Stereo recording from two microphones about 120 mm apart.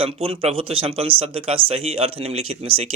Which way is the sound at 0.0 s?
50° right (ahead or behind).